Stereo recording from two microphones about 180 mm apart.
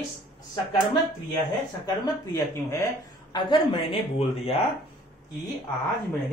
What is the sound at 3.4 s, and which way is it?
Speech, 30° left (ahead or behind).